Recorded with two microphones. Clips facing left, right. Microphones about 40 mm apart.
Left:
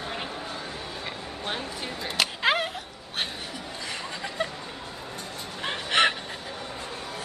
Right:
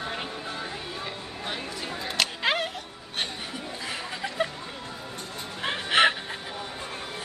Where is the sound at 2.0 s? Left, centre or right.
Centre.